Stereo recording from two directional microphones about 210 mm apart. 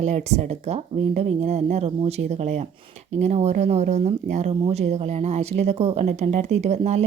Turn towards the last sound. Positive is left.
turn(degrees=-30)  # may be behind; listen again after turning